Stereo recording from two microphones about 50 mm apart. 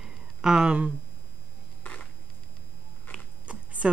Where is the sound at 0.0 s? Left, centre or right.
Centre.